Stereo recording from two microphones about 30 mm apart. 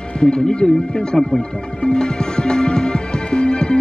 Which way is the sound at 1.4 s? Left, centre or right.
Left.